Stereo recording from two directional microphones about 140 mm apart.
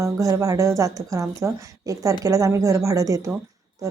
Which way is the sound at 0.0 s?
20° right (ahead or behind).